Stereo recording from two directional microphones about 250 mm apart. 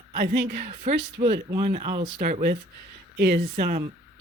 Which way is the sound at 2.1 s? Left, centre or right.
Right.